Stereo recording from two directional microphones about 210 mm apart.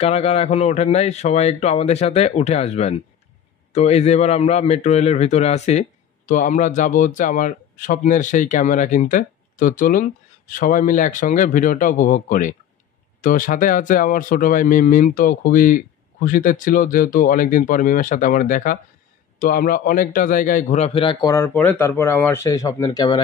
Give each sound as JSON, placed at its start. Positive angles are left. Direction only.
{"t": 0.0, "sound": "a man's voice", "side_deg": 30}